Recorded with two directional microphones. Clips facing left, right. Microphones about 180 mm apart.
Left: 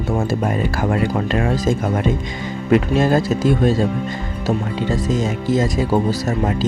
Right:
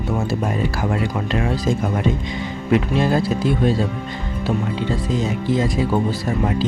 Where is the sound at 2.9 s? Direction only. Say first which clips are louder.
Left 3 dB; 45° left (ahead or behind).